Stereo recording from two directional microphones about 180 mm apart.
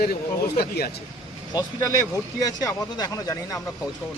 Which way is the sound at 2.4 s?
20° left (ahead or behind).